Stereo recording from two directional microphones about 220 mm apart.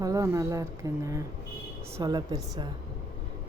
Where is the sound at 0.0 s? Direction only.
15° right (ahead or behind).